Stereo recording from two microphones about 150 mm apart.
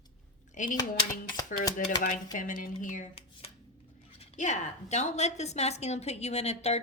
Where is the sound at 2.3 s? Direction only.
65° left (ahead or behind).